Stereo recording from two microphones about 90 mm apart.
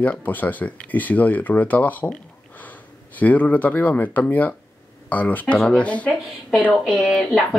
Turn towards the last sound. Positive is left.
turn(degrees=0)  # may be behind; listen again after turning